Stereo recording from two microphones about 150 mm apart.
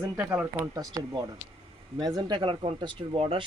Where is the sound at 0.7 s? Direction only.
25° right (ahead or behind).